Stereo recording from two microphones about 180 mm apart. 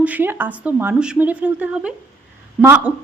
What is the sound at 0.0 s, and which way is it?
A woman's voice, 10° right (ahead or behind).